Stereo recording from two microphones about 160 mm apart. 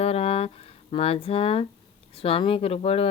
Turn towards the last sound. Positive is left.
turn(degrees=40)  # may be behind; listen again after turning